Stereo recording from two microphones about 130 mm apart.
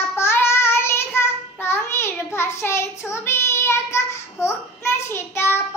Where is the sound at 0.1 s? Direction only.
20° left (ahead or behind).